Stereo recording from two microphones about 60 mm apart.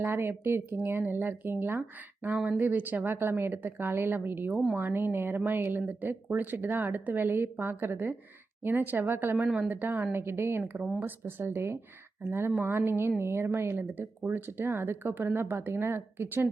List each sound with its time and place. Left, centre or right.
0.0 s speech: right
10.6 s speech: right